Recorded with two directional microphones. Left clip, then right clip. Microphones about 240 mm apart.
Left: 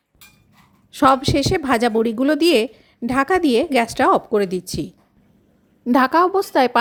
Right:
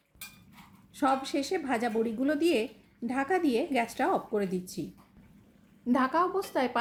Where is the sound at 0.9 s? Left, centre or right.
Left.